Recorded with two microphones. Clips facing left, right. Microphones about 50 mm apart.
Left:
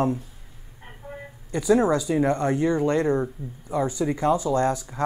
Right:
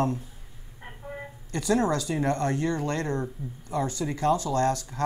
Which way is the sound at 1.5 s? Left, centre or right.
Centre.